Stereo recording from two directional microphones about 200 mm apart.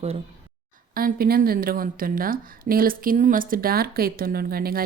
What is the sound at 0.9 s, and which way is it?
A woman's voice, 45° right (ahead or behind).